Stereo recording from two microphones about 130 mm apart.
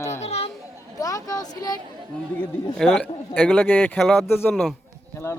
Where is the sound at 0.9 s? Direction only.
25° left (ahead or behind).